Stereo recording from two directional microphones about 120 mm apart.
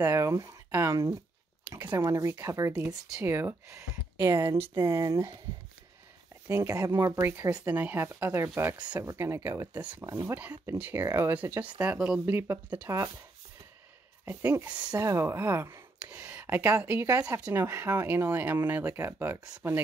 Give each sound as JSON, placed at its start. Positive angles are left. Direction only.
{"t": 0.0, "sound": "speech", "side_deg": -20}
{"t": 6.4, "sound": "speech", "side_deg": -20}
{"t": 8.7, "sound": "speech", "side_deg": -10}
{"t": 9.0, "sound": "speech", "side_deg": -25}
{"t": 14.2, "sound": "speech", "side_deg": -15}